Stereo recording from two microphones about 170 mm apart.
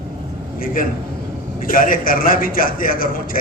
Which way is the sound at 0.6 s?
55° left (ahead or behind).